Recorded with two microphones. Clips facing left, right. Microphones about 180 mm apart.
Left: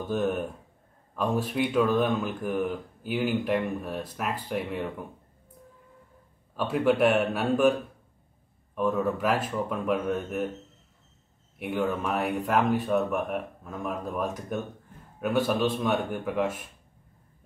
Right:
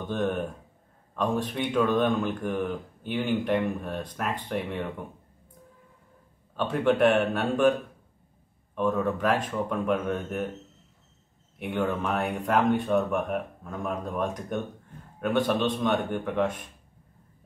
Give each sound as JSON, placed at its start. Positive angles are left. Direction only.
{"t": 0.0, "sound": "speech", "side_deg": 5}
{"t": 6.5, "sound": "speech", "side_deg": 5}
{"t": 8.7, "sound": "speech", "side_deg": 5}
{"t": 11.5, "sound": "speech", "side_deg": 0}